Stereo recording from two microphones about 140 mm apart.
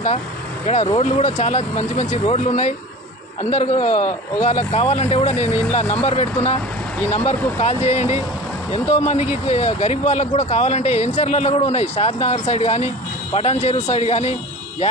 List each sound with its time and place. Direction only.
0.9 s a man's voice: 55° left (ahead or behind)